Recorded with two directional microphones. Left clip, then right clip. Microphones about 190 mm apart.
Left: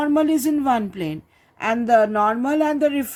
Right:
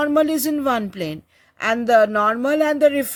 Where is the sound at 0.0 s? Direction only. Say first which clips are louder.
Right 1 dB; 40° right (ahead or behind).